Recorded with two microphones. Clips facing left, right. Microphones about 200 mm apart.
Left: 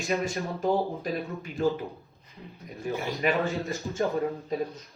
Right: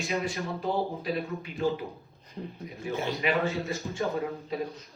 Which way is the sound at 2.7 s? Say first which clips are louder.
Left 1 dB; centre (ahead or behind).